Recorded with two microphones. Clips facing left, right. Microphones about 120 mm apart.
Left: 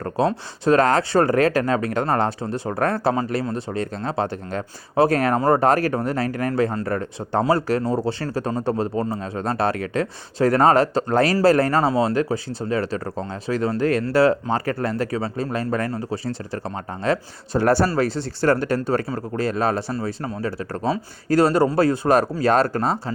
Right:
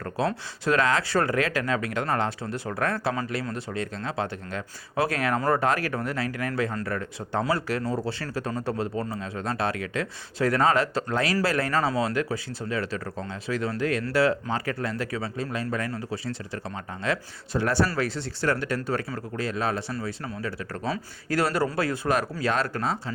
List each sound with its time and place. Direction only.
0.0 s speech: 25° left (ahead or behind)
0.8 s speech: 45° left (ahead or behind)
6.5 s speech: 30° left (ahead or behind); by 16.0 s 45° left (ahead or behind)
16.0 s speech: 30° left (ahead or behind)